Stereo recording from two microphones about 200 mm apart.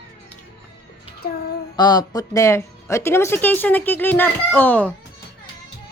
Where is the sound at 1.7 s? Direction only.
20° left (ahead or behind).